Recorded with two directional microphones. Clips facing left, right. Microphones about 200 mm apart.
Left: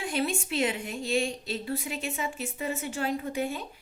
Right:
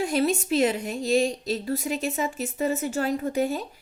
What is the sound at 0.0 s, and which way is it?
A woman's voice, 40° right (ahead or behind).